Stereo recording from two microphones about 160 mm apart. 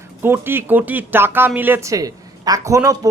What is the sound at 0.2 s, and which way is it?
Speech, 15° right (ahead or behind).